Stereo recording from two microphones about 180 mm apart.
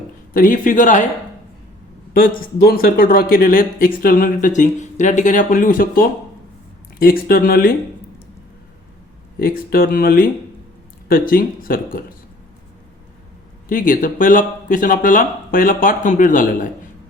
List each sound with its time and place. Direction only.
0.3 s speech: 50° left (ahead or behind)
2.1 s speech: 50° left (ahead or behind)
9.4 s speech: 55° left (ahead or behind)
13.7 s speech: 50° left (ahead or behind)